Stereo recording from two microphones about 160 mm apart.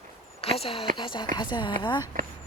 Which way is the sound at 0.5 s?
35° left (ahead or behind).